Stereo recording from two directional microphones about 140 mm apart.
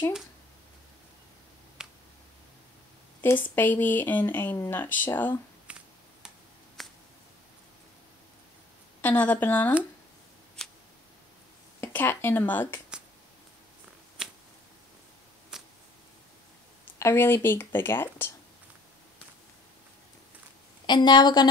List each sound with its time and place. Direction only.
1.8 s finger snapping: 5° right (ahead or behind)
3.2 s speech: 15° left (ahead or behind)
5.7 s finger snapping: 10° right (ahead or behind)
6.8 s a sound: centre (ahead or behind)
9.0 s speech: 10° left (ahead or behind)
11.8 s speech: 15° left (ahead or behind)
15.5 s a sound: 5° right (ahead or behind)
17.0 s speech: 15° left (ahead or behind)
20.8 s a woman's voice: 30° left (ahead or behind)